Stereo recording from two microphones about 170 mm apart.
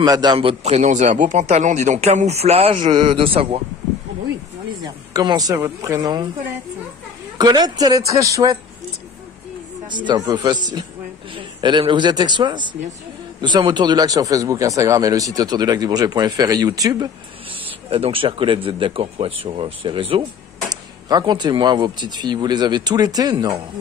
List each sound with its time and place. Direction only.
0.0 s a man's voice: 25° right (ahead or behind)
4.8 s speech: 25° right (ahead or behind)
7.3 s speech: 25° right (ahead or behind)
9.8 s speech: 25° right (ahead or behind)
17.8 s a man's voice: 35° right (ahead or behind)